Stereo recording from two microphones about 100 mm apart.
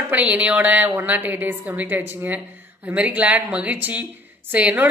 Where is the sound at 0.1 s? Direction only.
15° right (ahead or behind).